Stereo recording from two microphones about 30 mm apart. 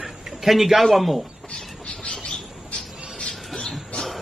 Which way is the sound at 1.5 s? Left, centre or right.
Left.